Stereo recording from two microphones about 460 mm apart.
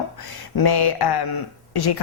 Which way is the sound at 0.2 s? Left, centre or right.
Left.